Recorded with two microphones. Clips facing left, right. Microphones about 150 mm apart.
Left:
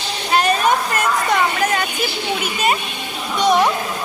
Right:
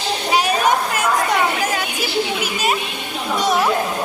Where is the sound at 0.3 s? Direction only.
10° right (ahead or behind).